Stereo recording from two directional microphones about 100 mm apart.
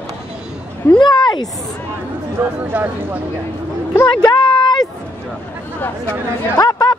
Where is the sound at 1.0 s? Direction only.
45° left (ahead or behind).